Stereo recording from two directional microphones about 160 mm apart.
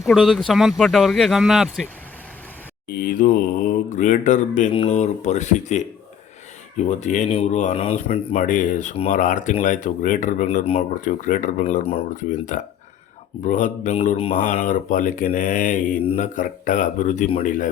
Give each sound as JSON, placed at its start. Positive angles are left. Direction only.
{"t": 0.0, "sound": "speech", "side_deg": 0}
{"t": 3.0, "sound": "speech", "side_deg": 55}
{"t": 8.4, "sound": "speech", "side_deg": 55}
{"t": 12.1, "sound": "speech", "side_deg": 50}